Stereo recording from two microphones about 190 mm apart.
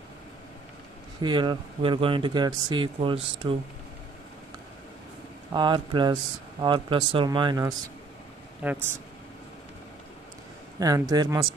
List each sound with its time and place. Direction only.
1.2 s speech: 25° right (ahead or behind)
5.5 s speech: 25° right (ahead or behind)
8.6 s speech: 10° right (ahead or behind)
10.8 s speech: 20° right (ahead or behind)